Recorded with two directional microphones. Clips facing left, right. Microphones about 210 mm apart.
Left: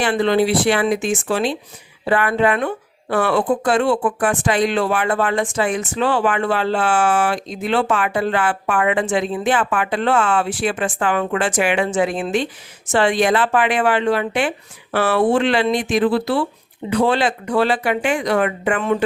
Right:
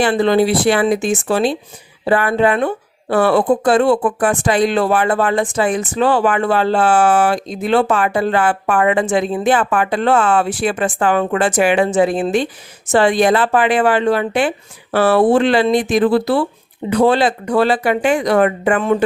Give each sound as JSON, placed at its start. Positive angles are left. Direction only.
{"t": 0.0, "sound": "a woman's voice", "side_deg": -35}